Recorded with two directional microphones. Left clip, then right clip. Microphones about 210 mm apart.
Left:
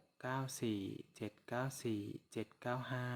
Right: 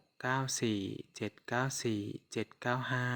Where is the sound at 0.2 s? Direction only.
20° right (ahead or behind).